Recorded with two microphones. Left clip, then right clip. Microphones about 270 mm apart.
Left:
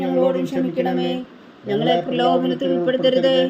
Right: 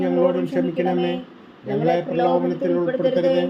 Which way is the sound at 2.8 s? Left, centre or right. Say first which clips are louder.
Left 4 dB; left.